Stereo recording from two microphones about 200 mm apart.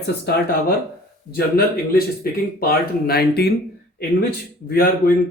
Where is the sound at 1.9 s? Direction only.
50° left (ahead or behind).